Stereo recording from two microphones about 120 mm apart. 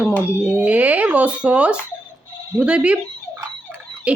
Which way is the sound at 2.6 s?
10° right (ahead or behind).